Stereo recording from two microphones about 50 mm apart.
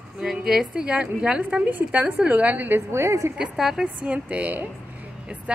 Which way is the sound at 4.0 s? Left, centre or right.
Right.